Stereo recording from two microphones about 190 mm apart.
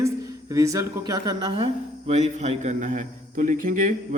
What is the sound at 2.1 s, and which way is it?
A man's voice, 35° right (ahead or behind).